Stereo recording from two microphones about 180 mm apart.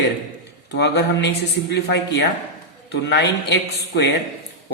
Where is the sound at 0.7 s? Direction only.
70° left (ahead or behind).